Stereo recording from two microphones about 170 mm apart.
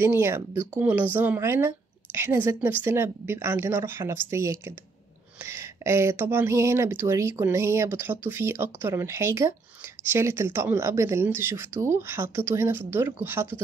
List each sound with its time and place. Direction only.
0.0 s speech: 15° right (ahead or behind)